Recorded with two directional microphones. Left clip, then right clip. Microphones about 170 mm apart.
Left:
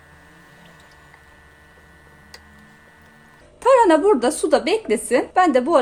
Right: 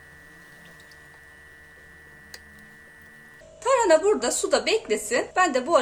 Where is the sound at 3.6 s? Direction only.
45° left (ahead or behind).